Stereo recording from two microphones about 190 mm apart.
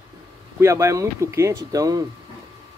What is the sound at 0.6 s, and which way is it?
Speech, 15° right (ahead or behind).